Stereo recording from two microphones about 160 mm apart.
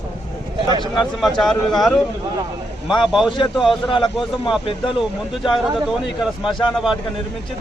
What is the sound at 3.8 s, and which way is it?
Speech, 30° left (ahead or behind).